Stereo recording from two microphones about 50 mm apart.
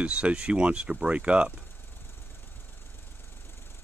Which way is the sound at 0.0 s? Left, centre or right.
Right.